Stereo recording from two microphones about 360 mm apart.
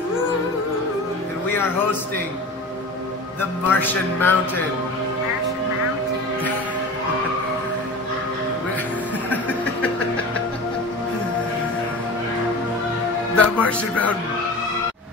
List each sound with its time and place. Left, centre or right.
3.3 s music: centre
9.3 s a sound: centre
13.4 s speech: centre